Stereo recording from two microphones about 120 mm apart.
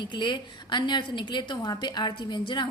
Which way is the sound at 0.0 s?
40° left (ahead or behind).